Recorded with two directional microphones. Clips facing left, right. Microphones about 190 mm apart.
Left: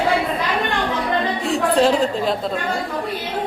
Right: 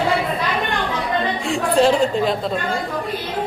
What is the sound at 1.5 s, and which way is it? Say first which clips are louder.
Speech: even; centre (ahead or behind).